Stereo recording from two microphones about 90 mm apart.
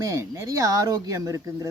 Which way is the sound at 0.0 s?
35° right (ahead or behind).